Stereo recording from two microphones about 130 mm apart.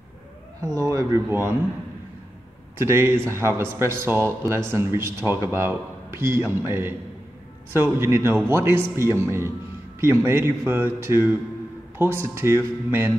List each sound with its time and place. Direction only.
0.7 s speech: 25° right (ahead or behind)
2.8 s speech: 20° right (ahead or behind)